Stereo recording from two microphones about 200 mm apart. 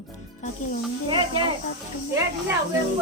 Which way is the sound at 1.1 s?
25° right (ahead or behind).